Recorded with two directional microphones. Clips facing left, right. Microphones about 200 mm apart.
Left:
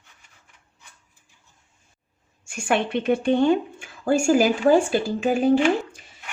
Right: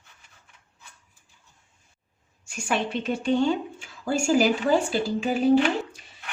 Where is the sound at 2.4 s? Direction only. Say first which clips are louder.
Left 4 dB; 55° left (ahead or behind).